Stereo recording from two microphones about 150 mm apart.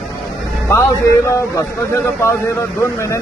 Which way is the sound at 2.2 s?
20° left (ahead or behind).